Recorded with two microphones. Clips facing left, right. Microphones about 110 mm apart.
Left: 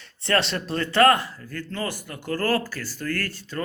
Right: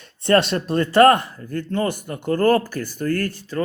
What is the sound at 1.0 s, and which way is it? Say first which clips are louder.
Speech: right 4 dB; 20° right (ahead or behind).